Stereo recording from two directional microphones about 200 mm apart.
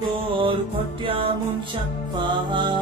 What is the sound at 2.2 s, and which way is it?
Music, 25° right (ahead or behind).